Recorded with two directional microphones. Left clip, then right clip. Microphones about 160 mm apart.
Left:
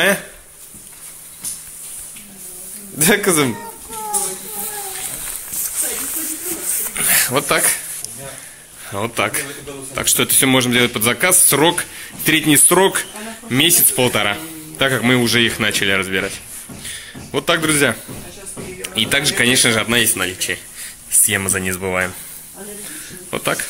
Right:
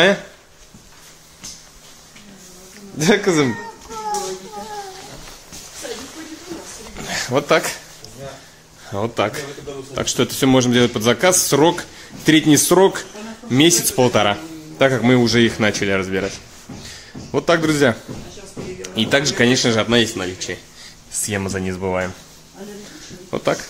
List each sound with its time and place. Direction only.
3.0 s a man's voice: centre (ahead or behind)
7.0 s a sound: 15° right (ahead or behind)
8.8 s a man's voice: 15° right (ahead or behind)
23.3 s speech: 15° right (ahead or behind)